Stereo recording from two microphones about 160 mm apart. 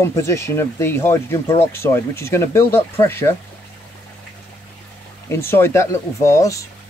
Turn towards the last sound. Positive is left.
turn(degrees=20)  # may be behind; listen again after turning